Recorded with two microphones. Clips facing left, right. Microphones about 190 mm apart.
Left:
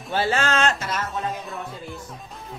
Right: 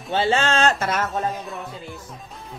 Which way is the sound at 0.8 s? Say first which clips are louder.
Right 5 dB; 55° right (ahead or behind).